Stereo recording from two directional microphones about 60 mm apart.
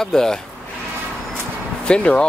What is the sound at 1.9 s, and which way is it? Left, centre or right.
Speech, centre.